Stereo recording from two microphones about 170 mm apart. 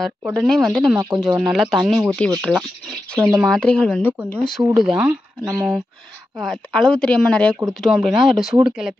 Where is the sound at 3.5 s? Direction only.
5° left (ahead or behind).